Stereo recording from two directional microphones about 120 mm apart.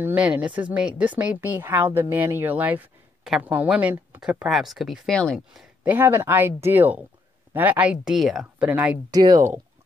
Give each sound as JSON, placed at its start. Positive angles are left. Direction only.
{"t": 0.0, "sound": "speech", "side_deg": -10}
{"t": 5.5, "sound": "a sound", "side_deg": -5}
{"t": 5.9, "sound": "speech", "side_deg": -20}
{"t": 9.1, "sound": "speech", "side_deg": -30}